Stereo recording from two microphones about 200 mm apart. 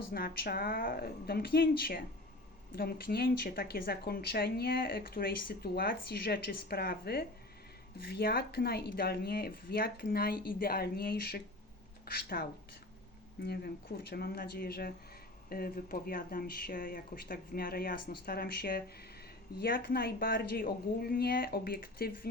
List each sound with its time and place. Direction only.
0.1 s speech: 50° left (ahead or behind)